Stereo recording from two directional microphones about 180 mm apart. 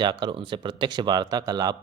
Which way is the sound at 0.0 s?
25° right (ahead or behind).